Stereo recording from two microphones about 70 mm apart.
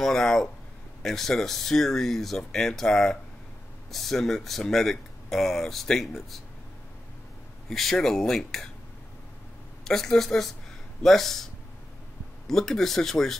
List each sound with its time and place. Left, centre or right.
0.0 s speech: centre
7.7 s speech: centre
9.8 s speech: centre
12.4 s speech: centre